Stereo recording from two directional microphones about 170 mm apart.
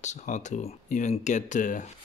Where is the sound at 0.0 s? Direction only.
45° left (ahead or behind).